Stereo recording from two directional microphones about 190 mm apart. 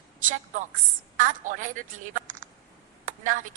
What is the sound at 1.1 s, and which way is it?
Speech, 45° right (ahead or behind).